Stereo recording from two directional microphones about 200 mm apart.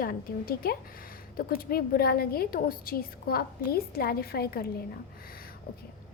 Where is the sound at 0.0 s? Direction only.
45° left (ahead or behind).